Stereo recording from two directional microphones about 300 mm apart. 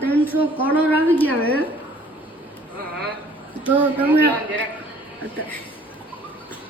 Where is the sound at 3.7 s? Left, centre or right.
Centre.